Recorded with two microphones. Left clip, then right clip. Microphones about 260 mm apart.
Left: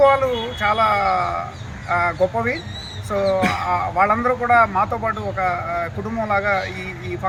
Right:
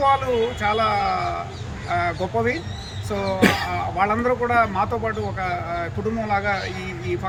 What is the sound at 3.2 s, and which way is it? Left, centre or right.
Speech, right.